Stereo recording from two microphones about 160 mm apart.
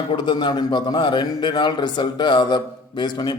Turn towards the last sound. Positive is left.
turn(degrees=25)  # may be behind; listen again after turning